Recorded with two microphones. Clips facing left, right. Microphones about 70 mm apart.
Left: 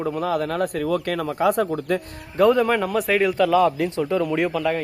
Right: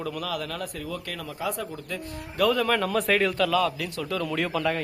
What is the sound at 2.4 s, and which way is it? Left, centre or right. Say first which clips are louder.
A man's voice: left 6 dB; left.